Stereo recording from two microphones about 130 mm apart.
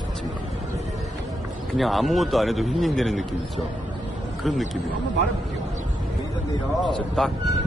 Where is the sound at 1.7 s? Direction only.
Centre (ahead or behind).